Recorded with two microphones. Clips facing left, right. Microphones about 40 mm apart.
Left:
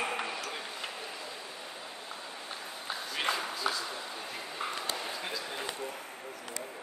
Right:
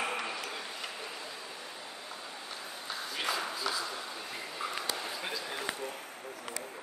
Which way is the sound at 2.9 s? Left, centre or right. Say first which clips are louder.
Left 2 dB; centre.